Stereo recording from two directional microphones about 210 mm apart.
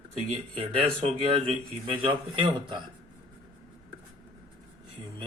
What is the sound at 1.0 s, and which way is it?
Speech, 30° right (ahead or behind).